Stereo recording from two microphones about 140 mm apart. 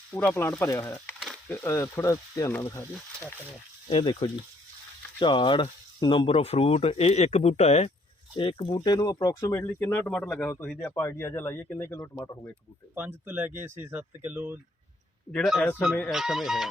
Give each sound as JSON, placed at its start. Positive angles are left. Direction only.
{"t": 0.1, "sound": "speech", "side_deg": 15}
{"t": 3.8, "sound": "speech", "side_deg": 35}
{"t": 8.4, "sound": "speech", "side_deg": 35}
{"t": 9.4, "sound": "speech", "side_deg": 15}
{"t": 10.1, "sound": "speech", "side_deg": 5}
{"t": 12.9, "sound": "speech", "side_deg": -10}
{"t": 15.8, "sound": "speech", "side_deg": 0}